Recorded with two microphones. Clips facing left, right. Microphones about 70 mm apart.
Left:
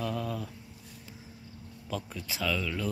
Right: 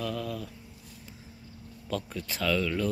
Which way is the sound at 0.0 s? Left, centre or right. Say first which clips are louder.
Even; left.